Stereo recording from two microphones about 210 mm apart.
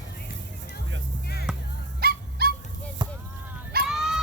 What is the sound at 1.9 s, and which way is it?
Dog, 45° right (ahead or behind).